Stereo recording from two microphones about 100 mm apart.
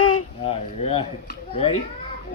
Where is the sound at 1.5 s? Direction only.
90° left.